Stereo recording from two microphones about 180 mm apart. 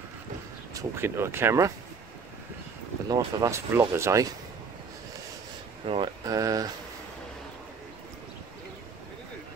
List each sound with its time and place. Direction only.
0.7 s speech: 15° right (ahead or behind)
3.1 s speech: 20° right (ahead or behind)
5.9 s speech: 25° right (ahead or behind)